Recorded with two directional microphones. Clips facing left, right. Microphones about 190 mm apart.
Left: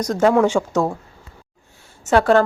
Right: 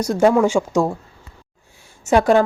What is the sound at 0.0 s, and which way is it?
Speech, 10° right (ahead or behind).